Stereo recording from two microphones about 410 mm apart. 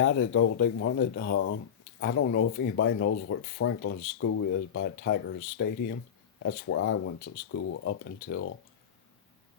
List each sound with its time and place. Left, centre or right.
0.0 s speech: left